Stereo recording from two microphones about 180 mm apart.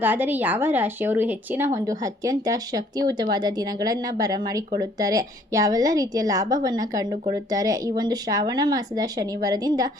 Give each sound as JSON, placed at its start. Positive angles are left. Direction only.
{"t": 0.0, "sound": "a woman's voice", "side_deg": -10}